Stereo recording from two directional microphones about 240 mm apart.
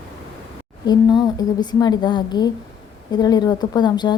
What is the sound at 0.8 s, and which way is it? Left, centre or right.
A woman's voice, centre.